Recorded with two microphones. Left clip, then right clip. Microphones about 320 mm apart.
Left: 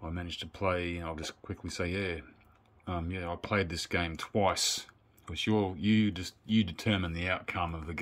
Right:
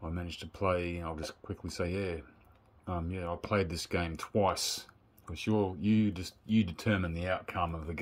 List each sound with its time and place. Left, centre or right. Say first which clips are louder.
0.0 s speech: left 2 dB; centre